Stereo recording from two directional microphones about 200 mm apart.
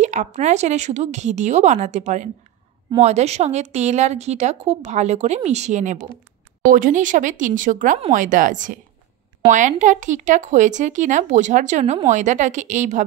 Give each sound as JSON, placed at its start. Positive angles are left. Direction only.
{"t": 0.0, "sound": "a woman's voice", "side_deg": -35}